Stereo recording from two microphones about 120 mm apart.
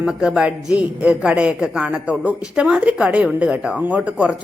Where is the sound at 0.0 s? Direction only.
5° right (ahead or behind).